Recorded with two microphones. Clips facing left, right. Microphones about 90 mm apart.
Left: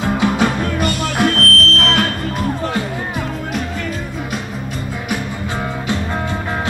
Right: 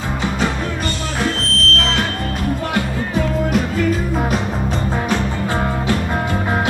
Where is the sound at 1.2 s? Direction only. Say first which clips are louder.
Left 5 dB; 60° left (ahead or behind).